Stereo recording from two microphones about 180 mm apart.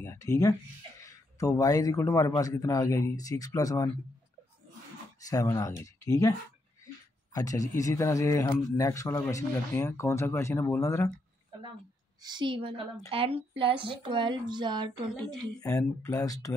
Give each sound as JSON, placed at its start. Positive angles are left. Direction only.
{"t": 0.0, "sound": "speech", "side_deg": 15}
{"t": 5.2, "sound": "speech", "side_deg": 20}
{"t": 7.3, "sound": "speech", "side_deg": 20}
{"t": 12.2, "sound": "speech", "side_deg": -25}
{"t": 15.8, "sound": "speech", "side_deg": 15}